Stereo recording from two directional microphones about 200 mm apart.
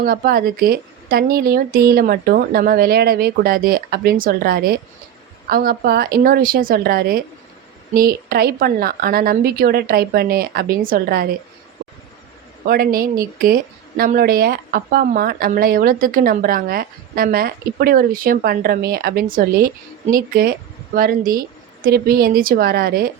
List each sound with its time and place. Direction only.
0.0 s a woman's voice: 50° right (ahead or behind)
12.6 s a woman's voice: 45° right (ahead or behind)